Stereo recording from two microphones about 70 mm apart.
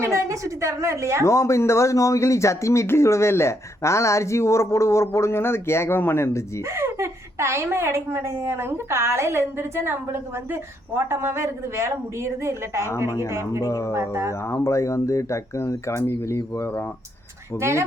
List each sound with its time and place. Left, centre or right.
0.0 s a woman's voice: right
1.2 s speech: left
6.7 s a woman's voice: right
13.1 s speech: left
13.3 s a woman's voice: right
13.7 s speech: left
13.9 s a woman's voice: right
14.4 s speech: left
17.6 s a woman's voice: right